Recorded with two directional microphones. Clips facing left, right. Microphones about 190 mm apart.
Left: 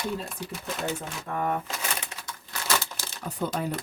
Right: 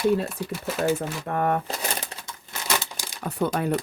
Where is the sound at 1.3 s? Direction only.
60° right (ahead or behind).